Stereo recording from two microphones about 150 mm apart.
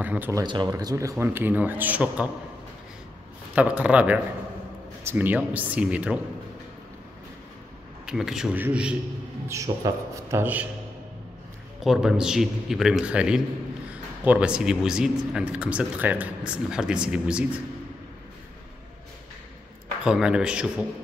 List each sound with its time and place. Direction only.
0.0 s speech: 10° right (ahead or behind)
0.4 s speech: 30° right (ahead or behind); by 2.2 s 10° right (ahead or behind)
3.5 s speech: 10° right (ahead or behind)
8.0 s a man's voice: 5° right (ahead or behind)
9.5 s speech: 20° right (ahead or behind)
11.8 s a man's voice: centre (ahead or behind)
20.0 s a man's voice: 5° right (ahead or behind)